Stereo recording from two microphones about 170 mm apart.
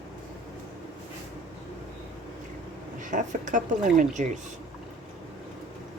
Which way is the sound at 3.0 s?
50° right (ahead or behind).